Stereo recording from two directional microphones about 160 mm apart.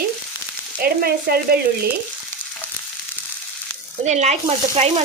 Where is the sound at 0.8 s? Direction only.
70° right (ahead or behind).